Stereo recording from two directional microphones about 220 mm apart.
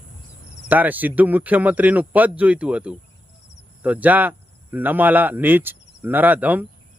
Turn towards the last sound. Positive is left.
turn(degrees=-5)  # may be behind; listen again after turning